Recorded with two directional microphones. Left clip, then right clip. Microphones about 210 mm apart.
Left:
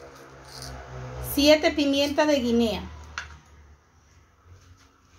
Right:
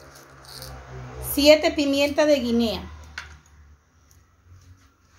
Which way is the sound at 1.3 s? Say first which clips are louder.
Right 3 dB; 5° right (ahead or behind).